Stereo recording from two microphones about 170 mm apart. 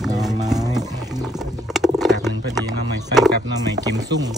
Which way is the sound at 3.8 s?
20° right (ahead or behind).